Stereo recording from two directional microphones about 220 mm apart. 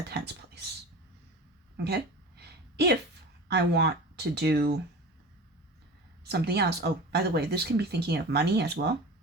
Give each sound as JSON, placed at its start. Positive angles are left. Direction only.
{"t": 0.1, "sound": "speech", "side_deg": -50}
{"t": 1.7, "sound": "a sound", "side_deg": -50}
{"t": 3.5, "sound": "speech", "side_deg": -50}
{"t": 6.2, "sound": "speech", "side_deg": -45}